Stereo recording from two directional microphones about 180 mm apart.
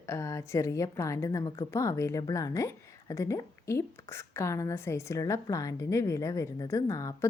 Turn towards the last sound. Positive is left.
turn(degrees=15)  # may be behind; listen again after turning